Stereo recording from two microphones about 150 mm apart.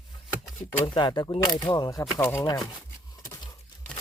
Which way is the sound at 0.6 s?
30° left (ahead or behind).